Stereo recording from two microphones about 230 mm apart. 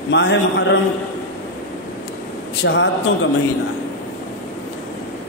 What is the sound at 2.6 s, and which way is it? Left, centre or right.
Speech, left.